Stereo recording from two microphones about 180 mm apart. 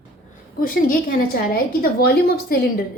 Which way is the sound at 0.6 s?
55° left (ahead or behind).